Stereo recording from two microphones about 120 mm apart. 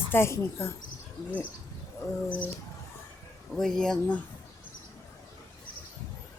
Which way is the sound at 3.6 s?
5° left (ahead or behind).